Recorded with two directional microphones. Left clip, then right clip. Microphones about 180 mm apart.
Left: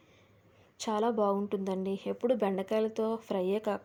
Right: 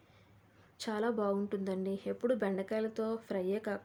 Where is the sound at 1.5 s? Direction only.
20° right (ahead or behind).